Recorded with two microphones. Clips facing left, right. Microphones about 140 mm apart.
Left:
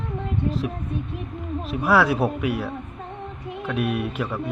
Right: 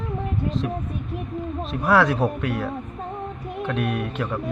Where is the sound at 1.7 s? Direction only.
5° left (ahead or behind).